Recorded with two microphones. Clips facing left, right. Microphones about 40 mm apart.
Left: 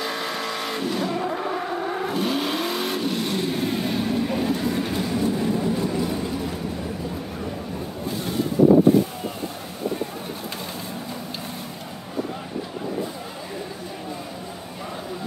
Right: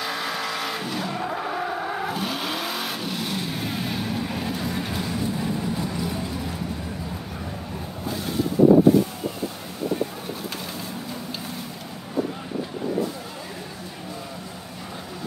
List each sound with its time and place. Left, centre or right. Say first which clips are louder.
0.0 s vehicle: even; centre